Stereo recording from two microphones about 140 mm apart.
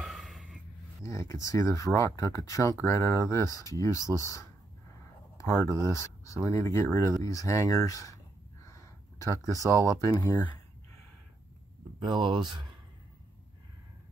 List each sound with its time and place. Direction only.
0.0 s gasp: centre (ahead or behind)
1.0 s speech: 20° left (ahead or behind)
8.6 s a sound: 20° left (ahead or behind)
9.5 s speech: 25° right (ahead or behind)
9.9 s speech: 25° left (ahead or behind)
12.0 s speech: 35° right (ahead or behind)